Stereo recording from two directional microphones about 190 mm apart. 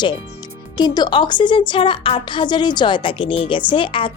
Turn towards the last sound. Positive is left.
turn(degrees=25)  # may be behind; listen again after turning